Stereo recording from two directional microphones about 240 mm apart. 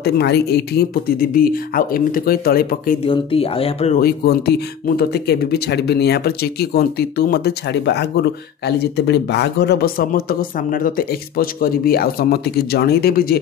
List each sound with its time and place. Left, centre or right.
0.0 s speech: left
3.0 s speech: left
4.0 s speech: left